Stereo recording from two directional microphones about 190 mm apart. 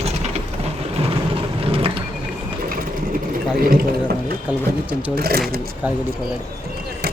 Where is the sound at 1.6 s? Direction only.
30° right (ahead or behind).